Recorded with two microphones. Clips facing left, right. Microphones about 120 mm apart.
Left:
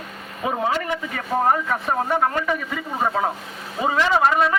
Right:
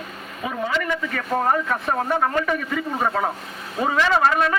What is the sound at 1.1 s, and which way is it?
A man's voice, 5° left (ahead or behind).